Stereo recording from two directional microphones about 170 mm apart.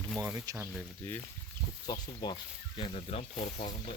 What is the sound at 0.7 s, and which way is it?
Speech, centre (ahead or behind).